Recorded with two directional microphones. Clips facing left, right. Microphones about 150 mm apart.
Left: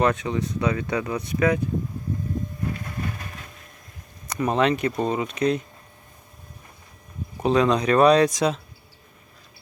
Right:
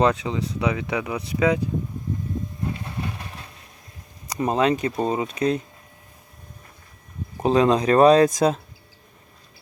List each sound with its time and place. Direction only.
0.0 s speech: 20° right (ahead or behind)
4.3 s speech: 30° right (ahead or behind)
7.4 s speech: 30° right (ahead or behind)